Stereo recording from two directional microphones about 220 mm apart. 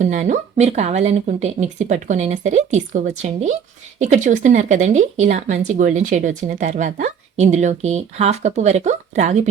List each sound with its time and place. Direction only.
0.0 s a woman's voice: 35° right (ahead or behind)